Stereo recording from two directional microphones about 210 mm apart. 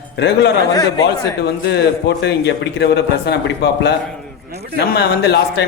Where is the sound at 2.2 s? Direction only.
55° left (ahead or behind).